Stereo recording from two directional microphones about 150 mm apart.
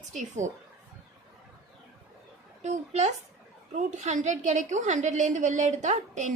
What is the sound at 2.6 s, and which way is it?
A woman's voice, 50° right (ahead or behind).